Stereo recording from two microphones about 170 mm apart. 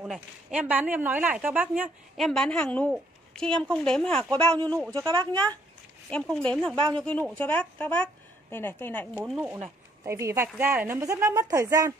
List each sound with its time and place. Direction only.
0.0 s a woman's voice: 5° right (ahead or behind)
2.1 s speech: centre (ahead or behind)
4.9 s speech: 25° right (ahead or behind)
6.0 s a woman's voice: 5° left (ahead or behind)
9.2 s a woman's voice: 10° right (ahead or behind)